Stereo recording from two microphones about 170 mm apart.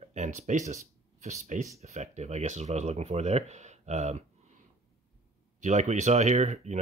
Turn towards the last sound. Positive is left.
turn(degrees=-45)  # may be behind; listen again after turning